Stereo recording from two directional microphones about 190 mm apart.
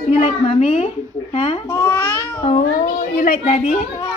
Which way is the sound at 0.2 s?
35° left (ahead or behind).